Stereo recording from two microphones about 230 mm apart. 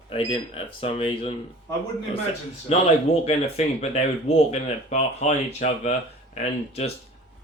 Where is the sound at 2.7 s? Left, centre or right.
Left.